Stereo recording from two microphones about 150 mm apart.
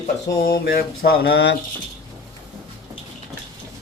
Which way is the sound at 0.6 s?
90° left.